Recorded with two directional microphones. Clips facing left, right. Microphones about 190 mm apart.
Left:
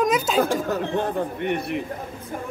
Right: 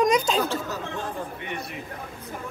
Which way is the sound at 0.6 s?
55° left (ahead or behind).